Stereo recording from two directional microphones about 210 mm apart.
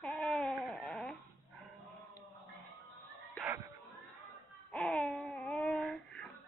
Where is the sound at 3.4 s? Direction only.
15° right (ahead or behind).